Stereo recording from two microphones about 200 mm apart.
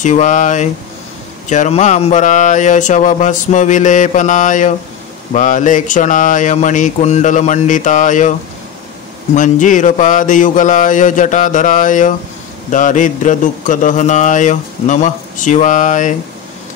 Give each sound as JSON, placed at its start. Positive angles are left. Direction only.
{"t": 0.0, "sound": "speech", "side_deg": 40}